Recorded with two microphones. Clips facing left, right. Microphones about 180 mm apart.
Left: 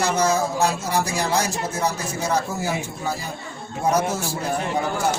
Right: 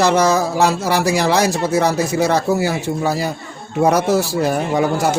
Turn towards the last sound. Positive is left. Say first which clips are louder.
# right 6 dB
turn(degrees=-85)